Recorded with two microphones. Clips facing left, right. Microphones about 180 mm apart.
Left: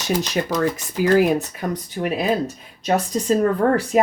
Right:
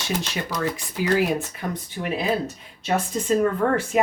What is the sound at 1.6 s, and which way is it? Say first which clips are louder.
Speech: left 4 dB; 45° left (ahead or behind).